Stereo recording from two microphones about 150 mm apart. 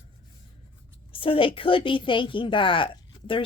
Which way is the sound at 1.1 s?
35° left (ahead or behind).